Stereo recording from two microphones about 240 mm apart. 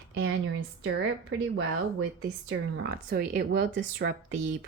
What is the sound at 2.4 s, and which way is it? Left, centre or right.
Speech, right.